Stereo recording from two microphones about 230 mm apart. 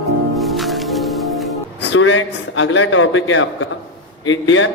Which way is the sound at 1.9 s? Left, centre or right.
Left.